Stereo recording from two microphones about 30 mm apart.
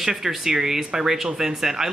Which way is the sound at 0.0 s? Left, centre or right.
Centre.